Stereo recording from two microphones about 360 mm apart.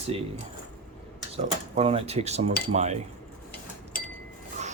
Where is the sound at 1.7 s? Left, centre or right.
Centre.